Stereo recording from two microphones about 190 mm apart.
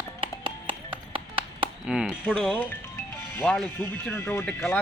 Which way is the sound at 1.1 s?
30° right (ahead or behind).